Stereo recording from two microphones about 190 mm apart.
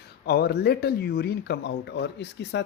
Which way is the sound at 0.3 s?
55° left (ahead or behind).